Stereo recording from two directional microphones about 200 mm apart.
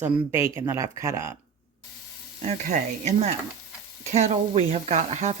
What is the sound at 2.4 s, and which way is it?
Speech, 40° right (ahead or behind).